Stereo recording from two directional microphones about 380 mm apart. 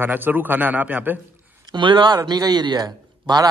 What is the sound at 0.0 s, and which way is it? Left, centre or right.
A man's voice, centre.